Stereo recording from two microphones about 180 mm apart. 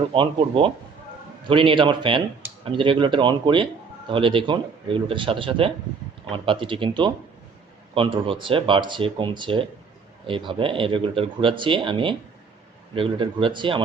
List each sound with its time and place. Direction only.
0.1 s speech: 30° right (ahead or behind)